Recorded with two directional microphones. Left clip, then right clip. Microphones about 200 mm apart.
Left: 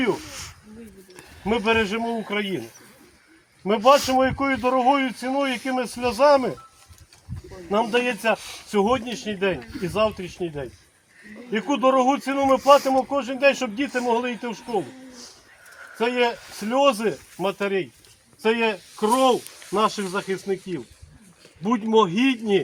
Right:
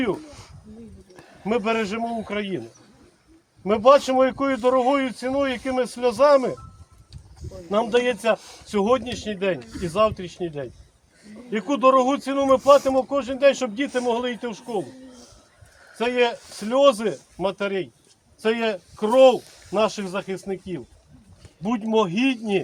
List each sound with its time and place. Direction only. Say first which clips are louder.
0.0 s a sound: left 2 dB; centre (ahead or behind)
1.5 s speech: left 2 dB; 5° right (ahead or behind)
7.7 s speech: right 1 dB; 5° right (ahead or behind)
8.4 s speech: left 6 dB; 25° right (ahead or behind)
8.7 s speech: right 1 dB; 5° right (ahead or behind)
16.0 s speech: right 1 dB; 5° right (ahead or behind)